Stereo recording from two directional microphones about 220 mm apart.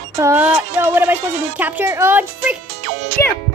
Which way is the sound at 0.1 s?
10° right (ahead or behind).